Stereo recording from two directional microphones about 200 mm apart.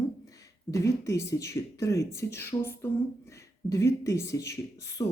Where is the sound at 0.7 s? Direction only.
15° left (ahead or behind).